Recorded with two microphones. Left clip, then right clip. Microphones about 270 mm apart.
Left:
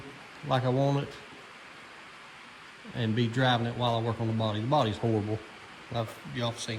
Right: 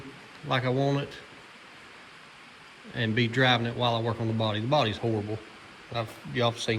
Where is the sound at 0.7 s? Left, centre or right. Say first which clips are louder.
Right 1 dB; left.